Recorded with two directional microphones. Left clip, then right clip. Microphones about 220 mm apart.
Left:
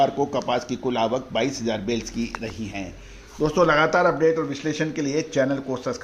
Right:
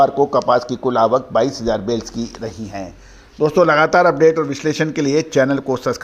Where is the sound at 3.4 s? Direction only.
30° right (ahead or behind).